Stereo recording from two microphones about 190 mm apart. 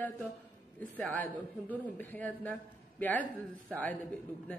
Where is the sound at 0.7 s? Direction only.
10° left (ahead or behind).